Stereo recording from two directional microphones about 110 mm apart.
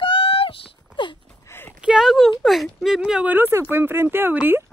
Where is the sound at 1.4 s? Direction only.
20° left (ahead or behind).